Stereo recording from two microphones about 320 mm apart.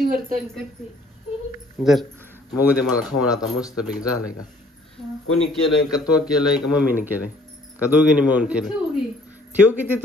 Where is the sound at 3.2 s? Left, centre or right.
Centre.